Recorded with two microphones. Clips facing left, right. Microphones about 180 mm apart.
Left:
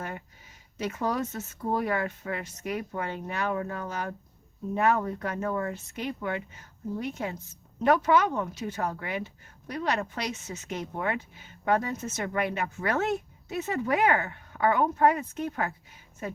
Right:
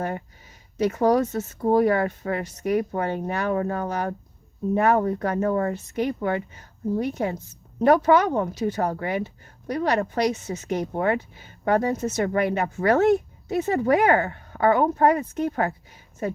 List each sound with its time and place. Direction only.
0.8 s speech: 40° right (ahead or behind)